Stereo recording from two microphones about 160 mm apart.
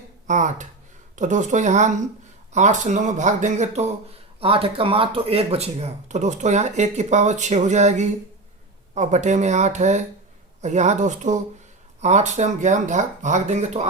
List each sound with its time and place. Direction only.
0.3 s speech: 50° right (ahead or behind)
4.4 s speech: 35° right (ahead or behind)